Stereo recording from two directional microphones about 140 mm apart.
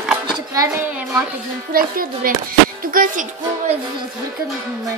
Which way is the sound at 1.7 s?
90° right.